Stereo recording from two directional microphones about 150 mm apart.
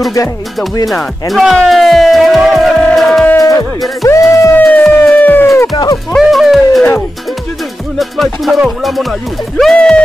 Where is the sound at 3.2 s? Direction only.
20° left (ahead or behind).